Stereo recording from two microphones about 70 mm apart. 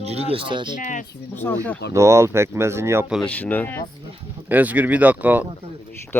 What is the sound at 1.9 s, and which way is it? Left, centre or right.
Speech, right.